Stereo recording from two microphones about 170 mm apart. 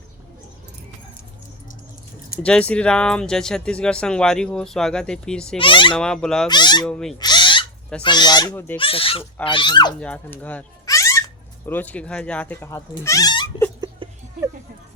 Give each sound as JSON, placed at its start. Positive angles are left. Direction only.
{"t": 2.4, "sound": "speech", "side_deg": 5}
{"t": 5.5, "sound": "speech", "side_deg": 30}
{"t": 5.9, "sound": "speech", "side_deg": 5}
{"t": 6.5, "sound": "speech", "side_deg": 25}
{"t": 6.8, "sound": "speech", "side_deg": 5}
{"t": 7.2, "sound": "owl", "side_deg": 25}
{"t": 8.0, "sound": "speech", "side_deg": 25}
{"t": 8.5, "sound": "speech", "side_deg": 10}
{"t": 8.8, "sound": "speech", "side_deg": 35}
{"t": 10.0, "sound": "speech", "side_deg": 10}
{"t": 10.8, "sound": "a sound", "side_deg": 20}
{"t": 11.6, "sound": "speech", "side_deg": 10}
{"t": 13.8, "sound": "a sound", "side_deg": -25}